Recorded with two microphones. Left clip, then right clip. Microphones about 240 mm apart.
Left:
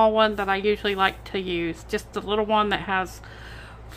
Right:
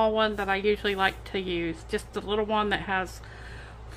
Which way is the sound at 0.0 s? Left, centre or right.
Centre.